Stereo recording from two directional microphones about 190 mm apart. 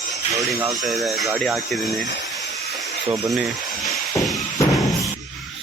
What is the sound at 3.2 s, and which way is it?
Speech, centre (ahead or behind).